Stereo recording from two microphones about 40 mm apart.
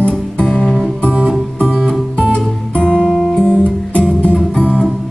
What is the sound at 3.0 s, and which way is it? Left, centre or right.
Music, centre.